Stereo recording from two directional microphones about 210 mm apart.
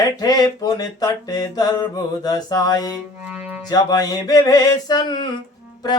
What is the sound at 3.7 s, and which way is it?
Speech, 20° left (ahead or behind).